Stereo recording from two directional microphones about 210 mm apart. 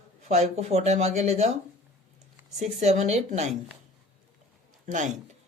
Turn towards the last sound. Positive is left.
turn(degrees=-35)  # may be behind; listen again after turning